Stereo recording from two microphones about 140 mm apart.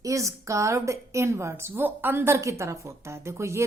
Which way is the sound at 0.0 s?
20° right (ahead or behind).